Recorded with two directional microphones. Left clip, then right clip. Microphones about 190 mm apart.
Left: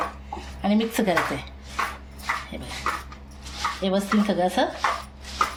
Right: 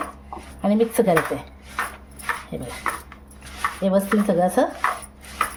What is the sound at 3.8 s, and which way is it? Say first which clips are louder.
Speech: right 5 dB; 60° right (ahead or behind).